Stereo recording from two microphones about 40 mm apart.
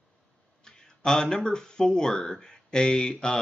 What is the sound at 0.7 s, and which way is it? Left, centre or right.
Speech, centre.